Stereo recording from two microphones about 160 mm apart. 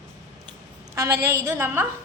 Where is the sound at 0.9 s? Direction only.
20° right (ahead or behind).